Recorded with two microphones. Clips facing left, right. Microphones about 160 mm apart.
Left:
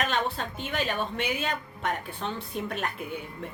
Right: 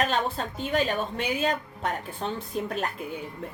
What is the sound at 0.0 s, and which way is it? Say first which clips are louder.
A woman's voice: right 2 dB; 35° right (ahead or behind).